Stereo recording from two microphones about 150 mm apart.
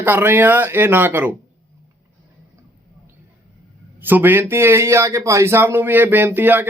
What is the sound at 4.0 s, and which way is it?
A man's voice, 15° right (ahead or behind).